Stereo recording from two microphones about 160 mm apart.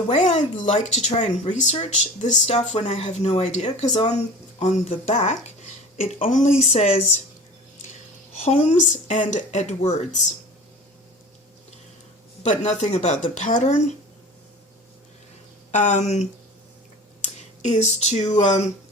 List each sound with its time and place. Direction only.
0.1 s speech: 45° left (ahead or behind)
8.4 s speech: 45° left (ahead or behind)
12.4 s speech: 45° left (ahead or behind)
15.7 s speech: 45° left (ahead or behind)
17.2 s speech: 45° left (ahead or behind)